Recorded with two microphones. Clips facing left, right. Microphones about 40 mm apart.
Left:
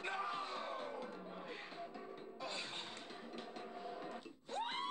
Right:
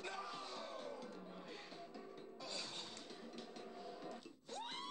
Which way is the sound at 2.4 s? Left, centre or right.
Left.